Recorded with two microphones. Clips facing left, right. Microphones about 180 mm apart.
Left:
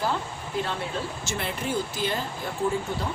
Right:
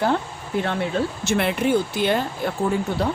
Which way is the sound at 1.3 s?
65° right (ahead or behind).